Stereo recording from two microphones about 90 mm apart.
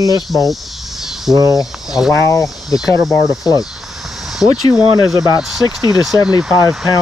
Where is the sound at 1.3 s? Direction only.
40° right (ahead or behind).